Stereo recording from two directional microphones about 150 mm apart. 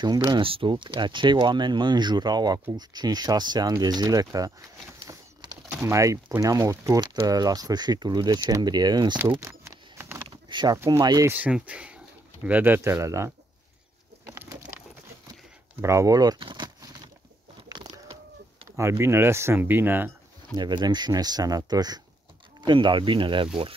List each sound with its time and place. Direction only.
0.3 s speech: 35° right (ahead or behind)
9.4 s vehicle: 20° right (ahead or behind)
10.3 s a sound: 30° right (ahead or behind)
10.9 s speech: 25° right (ahead or behind)
11.3 s speech: 10° right (ahead or behind)
14.2 s a sound: 15° right (ahead or behind)
15.8 s speech: 20° right (ahead or behind)
18.8 s speech: 15° right (ahead or behind)
20.5 s speech: 30° right (ahead or behind)